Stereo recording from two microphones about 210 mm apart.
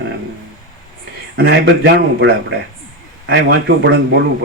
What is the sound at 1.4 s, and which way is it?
Speech, 55° right (ahead or behind).